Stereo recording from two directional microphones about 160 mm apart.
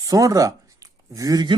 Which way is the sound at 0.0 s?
20° right (ahead or behind).